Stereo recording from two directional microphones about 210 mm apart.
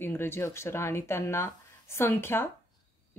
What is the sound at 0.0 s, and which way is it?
Speech, 10° left (ahead or behind).